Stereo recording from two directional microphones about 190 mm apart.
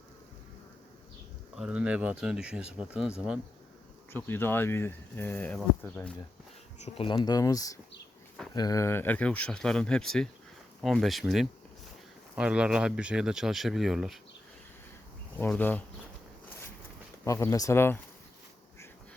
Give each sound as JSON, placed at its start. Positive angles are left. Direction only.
{"t": 1.5, "sound": "speech", "side_deg": -5}
{"t": 4.1, "sound": "speech", "side_deg": 10}
{"t": 6.7, "sound": "speech", "side_deg": 35}
{"t": 7.3, "sound": "speech", "side_deg": 20}
{"t": 15.4, "sound": "speech", "side_deg": 10}
{"t": 17.2, "sound": "speech", "side_deg": 15}